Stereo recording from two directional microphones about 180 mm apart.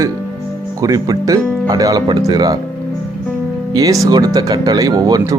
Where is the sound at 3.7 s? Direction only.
20° right (ahead or behind).